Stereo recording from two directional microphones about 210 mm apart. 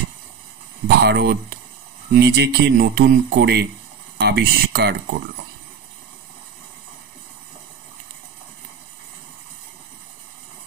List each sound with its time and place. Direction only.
0.8 s speech: 50° right (ahead or behind)